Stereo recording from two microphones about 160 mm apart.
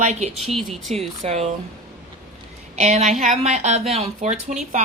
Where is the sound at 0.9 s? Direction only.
40° right (ahead or behind).